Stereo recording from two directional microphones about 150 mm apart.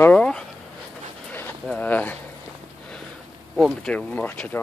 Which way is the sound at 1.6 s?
10° left (ahead or behind).